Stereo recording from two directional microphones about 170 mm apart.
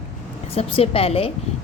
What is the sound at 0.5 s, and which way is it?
Speech, 35° left (ahead or behind).